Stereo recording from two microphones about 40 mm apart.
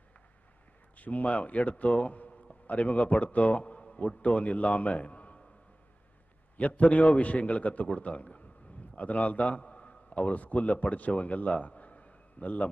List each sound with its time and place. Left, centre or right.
0.9 s a man's voice: left
6.7 s a man's voice: left